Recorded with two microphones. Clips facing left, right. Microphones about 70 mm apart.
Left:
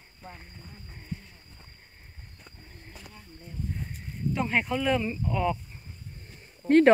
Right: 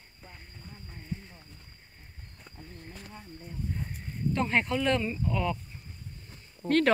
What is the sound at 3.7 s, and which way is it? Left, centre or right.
Speech, centre.